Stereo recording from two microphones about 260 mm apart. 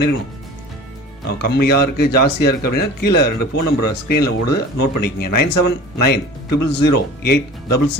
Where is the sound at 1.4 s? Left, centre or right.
Left.